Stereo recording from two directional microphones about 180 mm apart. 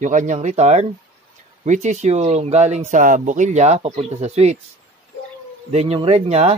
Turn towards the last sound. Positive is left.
turn(degrees=-35)  # may be behind; listen again after turning